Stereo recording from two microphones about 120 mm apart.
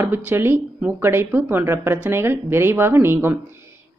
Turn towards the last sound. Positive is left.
turn(degrees=-20)  # may be behind; listen again after turning